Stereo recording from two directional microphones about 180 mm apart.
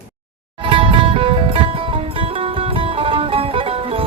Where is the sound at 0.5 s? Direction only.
30° right (ahead or behind).